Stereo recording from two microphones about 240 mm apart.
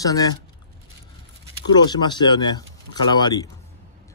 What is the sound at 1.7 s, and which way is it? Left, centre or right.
Speech, centre.